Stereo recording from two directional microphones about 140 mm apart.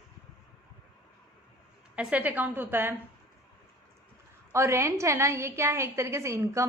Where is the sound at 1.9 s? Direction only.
10° right (ahead or behind).